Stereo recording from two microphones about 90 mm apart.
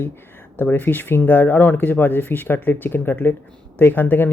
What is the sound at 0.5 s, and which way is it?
Speech, 25° left (ahead or behind).